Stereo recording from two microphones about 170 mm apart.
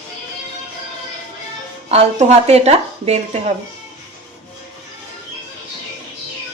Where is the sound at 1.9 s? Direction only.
40° right (ahead or behind).